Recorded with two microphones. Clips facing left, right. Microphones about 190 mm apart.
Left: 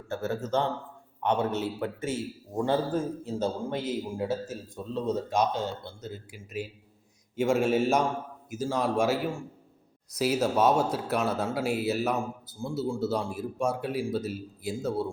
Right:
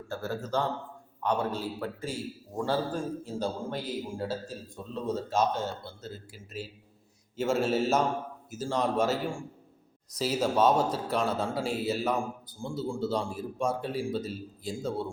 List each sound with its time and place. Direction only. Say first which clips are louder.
0.1 s a man's voice: left 3 dB; 20° left (ahead or behind)